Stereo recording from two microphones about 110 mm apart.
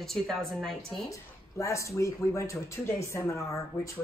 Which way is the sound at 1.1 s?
25° left (ahead or behind).